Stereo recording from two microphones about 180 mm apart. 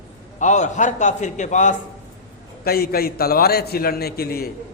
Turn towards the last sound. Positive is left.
turn(degrees=60)  # may be behind; listen again after turning